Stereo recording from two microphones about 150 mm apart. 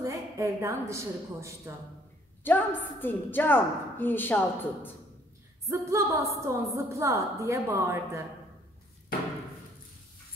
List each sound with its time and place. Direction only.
0.0 s a woman's voice: 20° right (ahead or behind)
2.4 s speech: 15° left (ahead or behind)
5.7 s a woman's voice: 20° right (ahead or behind)